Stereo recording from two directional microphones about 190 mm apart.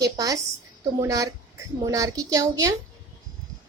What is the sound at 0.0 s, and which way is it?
A woman's voice, 20° right (ahead or behind).